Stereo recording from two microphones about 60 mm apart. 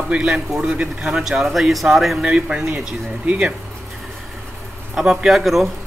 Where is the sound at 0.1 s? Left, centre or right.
Centre.